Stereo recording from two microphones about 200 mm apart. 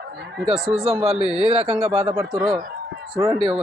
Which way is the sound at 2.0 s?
15° right (ahead or behind).